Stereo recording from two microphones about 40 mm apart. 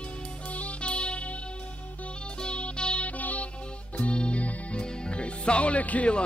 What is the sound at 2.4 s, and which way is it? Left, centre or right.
Music, left.